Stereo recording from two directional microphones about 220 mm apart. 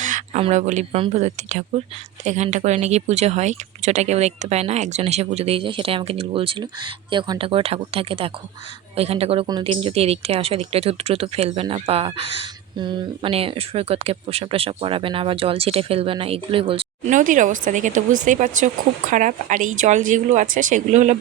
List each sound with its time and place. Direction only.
0.0 s a woman's voice: 35° right (ahead or behind)